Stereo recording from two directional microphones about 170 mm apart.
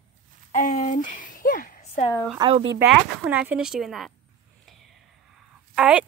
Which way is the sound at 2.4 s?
30° right (ahead or behind).